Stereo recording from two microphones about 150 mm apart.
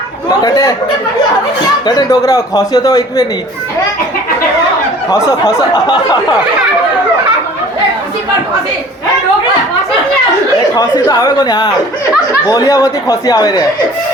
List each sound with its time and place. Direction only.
0.3 s speech: 25° left (ahead or behind)
1.9 s speech: 25° left (ahead or behind)
5.7 s speech: 25° left (ahead or behind)
10.8 s speech: 25° left (ahead or behind)